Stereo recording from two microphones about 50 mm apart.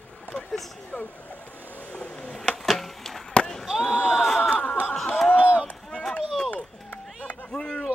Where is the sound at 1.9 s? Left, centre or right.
Centre.